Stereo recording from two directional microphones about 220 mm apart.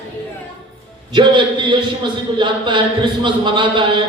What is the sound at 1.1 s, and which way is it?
Speech, 20° right (ahead or behind).